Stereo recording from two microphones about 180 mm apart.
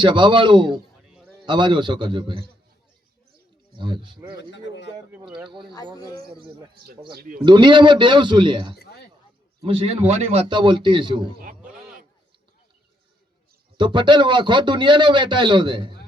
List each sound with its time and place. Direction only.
0.0 s a man's voice: 25° right (ahead or behind)
3.8 s a man's voice: 25° right (ahead or behind)
4.4 s speech: 80° left
5.5 s a man's voice: 25° right (ahead or behind)
6.0 s speech: 20° left (ahead or behind)
6.3 s a man's voice: 30° right (ahead or behind)
8.8 s a sound: 60° left (ahead or behind)
9.6 s a man's voice: 30° right (ahead or behind)
11.6 s a sound: 5° right (ahead or behind)
13.7 s a man's voice: 25° right (ahead or behind)